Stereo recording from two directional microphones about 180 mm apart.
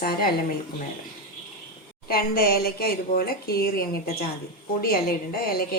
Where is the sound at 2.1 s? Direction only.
60° left (ahead or behind).